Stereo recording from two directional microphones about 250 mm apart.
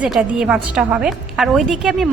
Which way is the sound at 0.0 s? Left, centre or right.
Centre.